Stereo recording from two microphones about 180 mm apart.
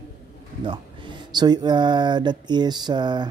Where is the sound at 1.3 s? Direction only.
25° right (ahead or behind).